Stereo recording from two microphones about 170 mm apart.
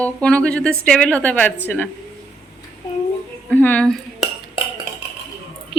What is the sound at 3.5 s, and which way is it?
Dishes, 10° left (ahead or behind).